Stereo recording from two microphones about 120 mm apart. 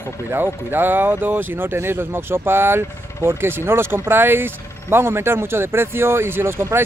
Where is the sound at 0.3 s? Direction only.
15° right (ahead or behind).